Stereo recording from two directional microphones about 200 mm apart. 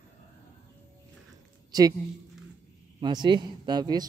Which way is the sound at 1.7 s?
20° right (ahead or behind).